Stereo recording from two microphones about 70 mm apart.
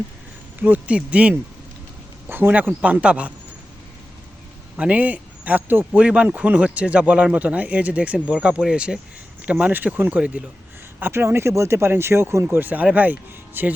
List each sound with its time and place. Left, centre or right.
0.6 s speech: centre
2.2 s a sound: right
2.5 s speech: right
4.8 s speech: centre
6.0 s speech: centre
11.0 s speech: right
12.5 s speech: right